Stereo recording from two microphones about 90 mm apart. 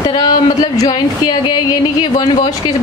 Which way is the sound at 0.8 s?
50° left (ahead or behind).